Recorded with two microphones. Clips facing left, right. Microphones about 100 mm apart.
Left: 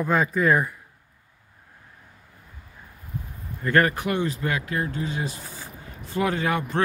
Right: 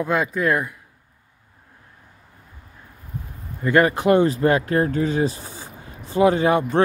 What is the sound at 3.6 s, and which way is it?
Speech, 15° right (ahead or behind).